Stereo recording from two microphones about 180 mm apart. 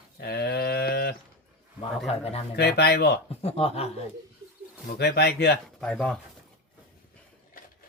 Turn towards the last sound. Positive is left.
turn(degrees=5)  # may be behind; listen again after turning